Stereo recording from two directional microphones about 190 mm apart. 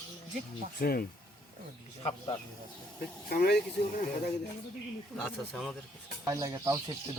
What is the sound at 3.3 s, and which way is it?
Speech, 55° left (ahead or behind).